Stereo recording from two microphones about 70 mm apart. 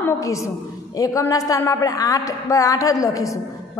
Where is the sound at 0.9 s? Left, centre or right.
Left.